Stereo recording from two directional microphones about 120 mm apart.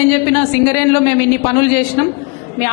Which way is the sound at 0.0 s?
15° left (ahead or behind).